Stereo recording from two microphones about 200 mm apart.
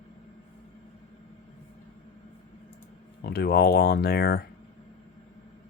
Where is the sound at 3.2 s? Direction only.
50° left (ahead or behind).